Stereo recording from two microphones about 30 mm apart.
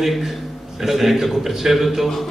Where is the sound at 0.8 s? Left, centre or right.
Centre.